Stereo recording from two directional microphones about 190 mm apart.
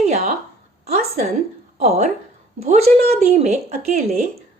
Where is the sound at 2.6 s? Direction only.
35° right (ahead or behind).